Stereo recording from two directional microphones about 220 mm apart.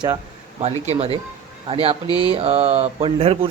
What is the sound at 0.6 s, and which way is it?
Speech, 30° right (ahead or behind).